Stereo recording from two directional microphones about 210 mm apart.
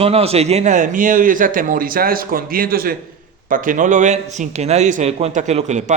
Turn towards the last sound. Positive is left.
turn(degrees=-35)  # may be behind; listen again after turning